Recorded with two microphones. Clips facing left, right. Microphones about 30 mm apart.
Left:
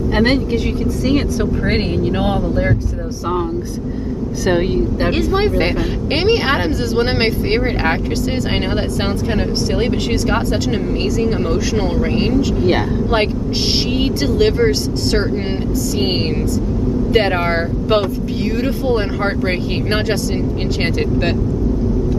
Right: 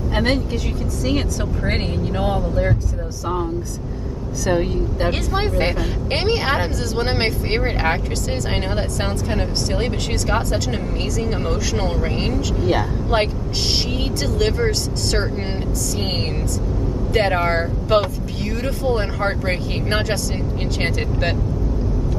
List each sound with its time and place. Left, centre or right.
4.5 s speech: left
5.3 s speech: centre
11.1 s speech: centre
14.0 s speech: centre
17.1 s speech: centre